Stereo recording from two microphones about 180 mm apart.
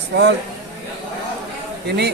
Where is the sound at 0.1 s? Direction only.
65° right (ahead or behind).